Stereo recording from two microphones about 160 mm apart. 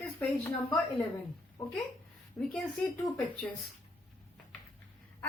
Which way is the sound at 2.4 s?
20° left (ahead or behind).